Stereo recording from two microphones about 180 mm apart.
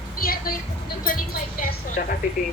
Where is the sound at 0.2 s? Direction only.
55° left (ahead or behind).